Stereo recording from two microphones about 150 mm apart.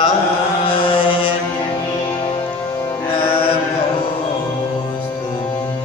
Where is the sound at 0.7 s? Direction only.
35° left (ahead or behind).